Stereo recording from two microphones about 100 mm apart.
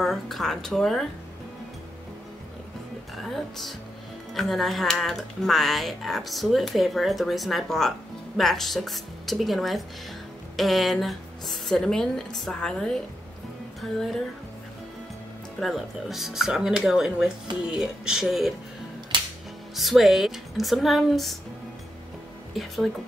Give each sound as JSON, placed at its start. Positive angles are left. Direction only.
{"t": 0.0, "sound": "speech", "side_deg": 0}
{"t": 3.2, "sound": "speech", "side_deg": 0}
{"t": 15.6, "sound": "speech", "side_deg": 0}
{"t": 19.1, "sound": "music", "side_deg": -50}
{"t": 19.7, "sound": "speech", "side_deg": 0}